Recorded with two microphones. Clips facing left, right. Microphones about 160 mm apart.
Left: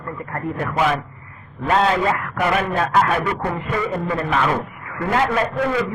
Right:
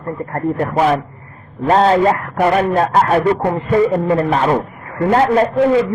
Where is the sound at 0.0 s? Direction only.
40° right (ahead or behind).